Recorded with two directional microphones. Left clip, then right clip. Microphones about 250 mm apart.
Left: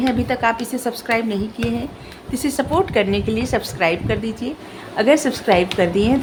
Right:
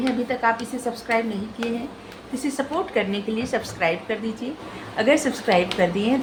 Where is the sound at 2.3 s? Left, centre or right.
Left.